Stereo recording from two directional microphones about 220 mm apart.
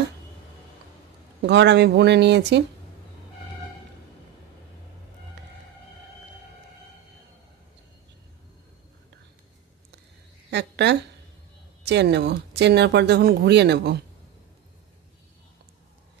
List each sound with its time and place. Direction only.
1.4 s speech: 50° right (ahead or behind)
10.5 s a sound: 50° right (ahead or behind)
11.8 s speech: 50° right (ahead or behind)